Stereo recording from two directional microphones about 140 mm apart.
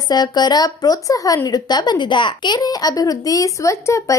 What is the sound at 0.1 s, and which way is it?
Speech, 30° left (ahead or behind).